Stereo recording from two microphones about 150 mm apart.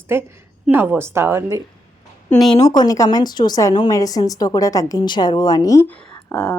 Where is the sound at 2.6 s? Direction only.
25° left (ahead or behind).